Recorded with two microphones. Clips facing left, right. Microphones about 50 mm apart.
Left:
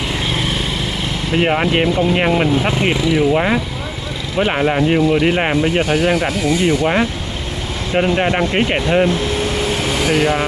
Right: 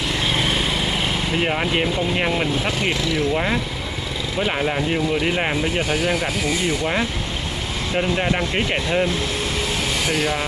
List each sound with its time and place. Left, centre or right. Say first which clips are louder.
0.3 s lawn mower: right 1 dB; centre
1.3 s speech: left 8 dB; centre
6.6 s speech: left 8 dB; left
10.1 s speech: left 8 dB; left